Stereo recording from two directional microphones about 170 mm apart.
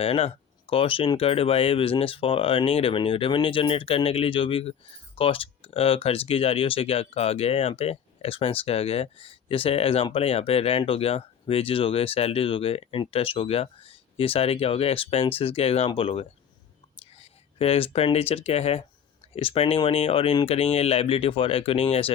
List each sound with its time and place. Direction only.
0.0 s speech: 35° left (ahead or behind)